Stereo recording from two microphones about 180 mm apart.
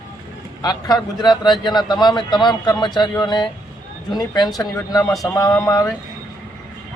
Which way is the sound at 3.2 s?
25° left (ahead or behind).